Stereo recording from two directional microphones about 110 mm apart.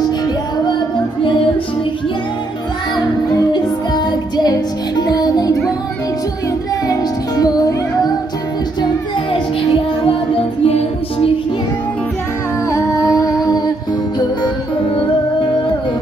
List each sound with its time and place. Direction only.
3.5 s music: 40° left (ahead or behind)
6.9 s music: 35° left (ahead or behind)
10.0 s music: 55° left (ahead or behind)
12.7 s music: 30° left (ahead or behind)
14.4 s music: 55° left (ahead or behind)